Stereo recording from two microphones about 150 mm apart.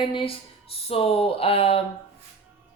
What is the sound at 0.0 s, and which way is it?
Speech, 35° left (ahead or behind).